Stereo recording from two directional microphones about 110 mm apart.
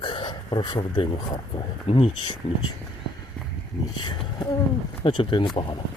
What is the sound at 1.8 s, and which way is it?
Speech, 55° left (ahead or behind).